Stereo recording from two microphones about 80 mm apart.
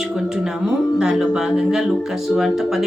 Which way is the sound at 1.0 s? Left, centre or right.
Centre.